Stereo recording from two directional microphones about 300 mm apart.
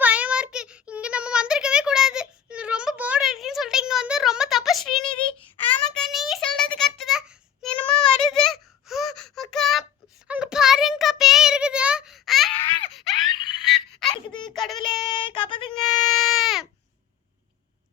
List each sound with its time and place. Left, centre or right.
0.0 s child singing: centre
5.8 s a sound: centre
7.0 s child singing: centre
12.9 s a sound: centre
13.6 s frog: centre
14.3 s a sound: centre
14.5 s child singing: centre
14.9 s child singing: centre
16.1 s baby cry: centre